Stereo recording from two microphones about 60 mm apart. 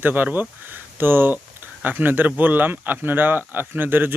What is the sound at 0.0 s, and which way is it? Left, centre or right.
Speech, right.